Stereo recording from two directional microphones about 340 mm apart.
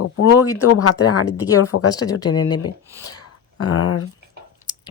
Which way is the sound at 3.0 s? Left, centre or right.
Left.